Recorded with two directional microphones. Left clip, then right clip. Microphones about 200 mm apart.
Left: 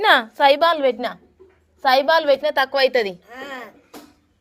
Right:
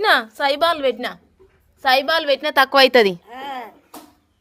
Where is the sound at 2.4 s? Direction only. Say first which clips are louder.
Right 4 dB; 40° right (ahead or behind).